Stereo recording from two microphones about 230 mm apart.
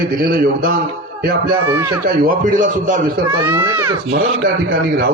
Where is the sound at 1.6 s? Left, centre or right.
Centre.